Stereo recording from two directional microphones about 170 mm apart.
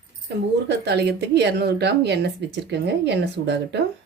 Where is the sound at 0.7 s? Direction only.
75° right (ahead or behind).